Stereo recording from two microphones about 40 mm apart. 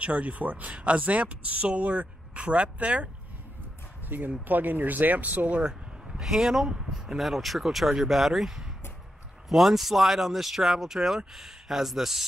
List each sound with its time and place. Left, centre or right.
0.0 s speech: right
4.3 s speech: right
5.7 s speech: centre